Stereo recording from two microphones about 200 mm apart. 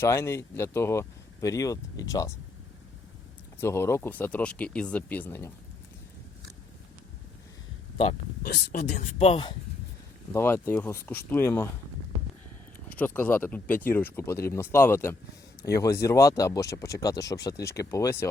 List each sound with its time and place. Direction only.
0.0 s speech: 15° left (ahead or behind)
3.6 s speech: 10° left (ahead or behind)
8.4 s speech: 50° left (ahead or behind); by 9.6 s 25° left (ahead or behind)
10.3 s speech: 10° left (ahead or behind)
13.0 s speech: 10° left (ahead or behind)